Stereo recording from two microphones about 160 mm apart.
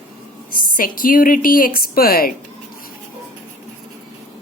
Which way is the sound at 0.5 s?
60° left (ahead or behind).